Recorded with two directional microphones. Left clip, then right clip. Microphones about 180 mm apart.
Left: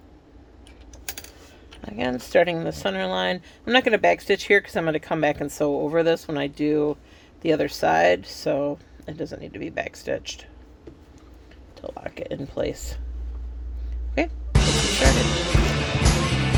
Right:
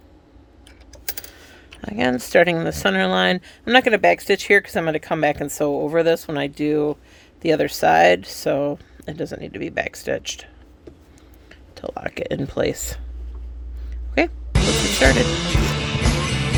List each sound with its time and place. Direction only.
1.8 s speech: 30° right (ahead or behind)
11.7 s speech: 45° right (ahead or behind)
14.2 s speech: 35° right (ahead or behind)
14.5 s music: centre (ahead or behind)